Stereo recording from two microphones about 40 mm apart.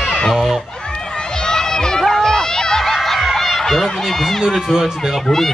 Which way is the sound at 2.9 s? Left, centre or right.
Centre.